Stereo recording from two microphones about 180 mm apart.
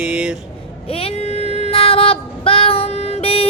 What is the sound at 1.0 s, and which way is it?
Child singing, 35° left (ahead or behind).